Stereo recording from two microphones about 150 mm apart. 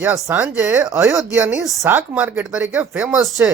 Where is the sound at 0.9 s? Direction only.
20° right (ahead or behind).